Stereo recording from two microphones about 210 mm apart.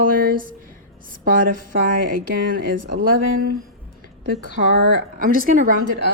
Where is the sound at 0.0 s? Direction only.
45° right (ahead or behind).